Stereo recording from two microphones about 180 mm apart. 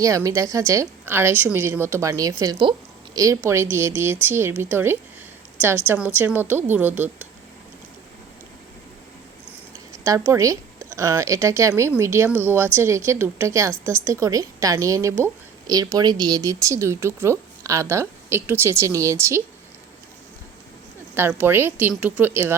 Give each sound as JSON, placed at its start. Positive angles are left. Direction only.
{"t": 0.0, "sound": "a woman's voice", "side_deg": -20}
{"t": 9.9, "sound": "a woman's voice", "side_deg": -15}
{"t": 21.2, "sound": "a woman's voice", "side_deg": -10}